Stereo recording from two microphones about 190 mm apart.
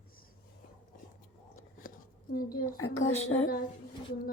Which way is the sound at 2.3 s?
50° left (ahead or behind).